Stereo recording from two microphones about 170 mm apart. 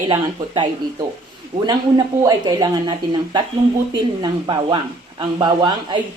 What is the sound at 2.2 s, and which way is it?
Speech, 25° right (ahead or behind).